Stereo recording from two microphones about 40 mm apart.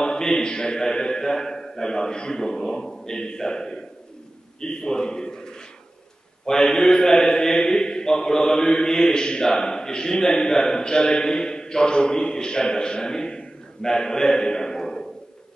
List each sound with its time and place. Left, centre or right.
0.0 s a man's voice: centre